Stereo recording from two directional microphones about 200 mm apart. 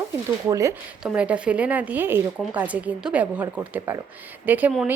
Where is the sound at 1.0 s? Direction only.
5° right (ahead or behind).